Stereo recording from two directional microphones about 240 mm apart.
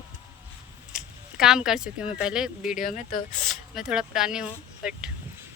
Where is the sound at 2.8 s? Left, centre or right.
Left.